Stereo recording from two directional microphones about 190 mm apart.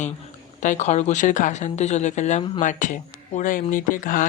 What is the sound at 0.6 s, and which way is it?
Speech, 40° left (ahead or behind).